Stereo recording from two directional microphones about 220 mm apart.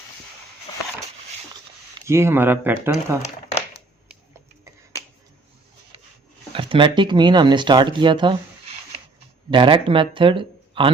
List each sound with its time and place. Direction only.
2.0 s speech: 10° right (ahead or behind)
4.6 s finger snapping: 15° right (ahead or behind)
6.5 s speech: 25° right (ahead or behind)